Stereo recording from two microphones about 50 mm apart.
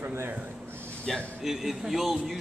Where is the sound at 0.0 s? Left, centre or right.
Right.